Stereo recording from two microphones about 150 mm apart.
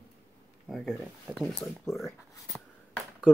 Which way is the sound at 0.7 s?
Centre (ahead or behind).